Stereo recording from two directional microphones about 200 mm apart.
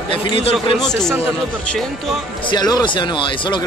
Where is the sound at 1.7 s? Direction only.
Centre (ahead or behind).